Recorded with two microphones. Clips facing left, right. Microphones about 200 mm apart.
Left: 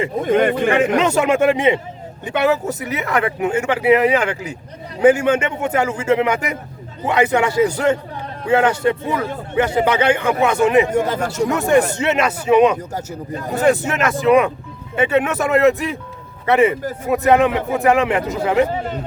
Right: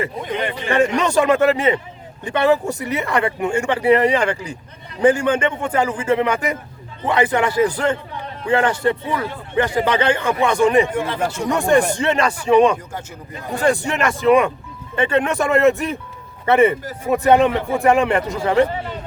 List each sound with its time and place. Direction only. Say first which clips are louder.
0.2 s speech: left 9 dB; 50° left (ahead or behind)
1.0 s a man's voice: even; 10° left (ahead or behind)
2.2 s a man's voice: right 1 dB; 5° left (ahead or behind)
8.4 s a man's voice: left 2 dB; 10° left (ahead or behind)
10.8 s speech: left 3 dB; 40° left (ahead or behind)
11.4 s a man's voice: left 1 dB; 5° left (ahead or behind)
12.9 s speech: left 6 dB; 40° left (ahead or behind)
13.5 s a man's voice: left 2 dB; 5° left (ahead or behind)